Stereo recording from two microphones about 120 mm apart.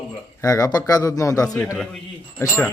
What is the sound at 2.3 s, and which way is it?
Speech, 20° left (ahead or behind).